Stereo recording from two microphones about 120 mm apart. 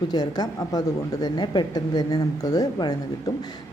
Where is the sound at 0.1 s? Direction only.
35° left (ahead or behind).